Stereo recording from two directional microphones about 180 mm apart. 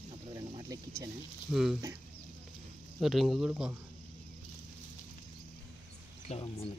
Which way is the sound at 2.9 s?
Centre (ahead or behind).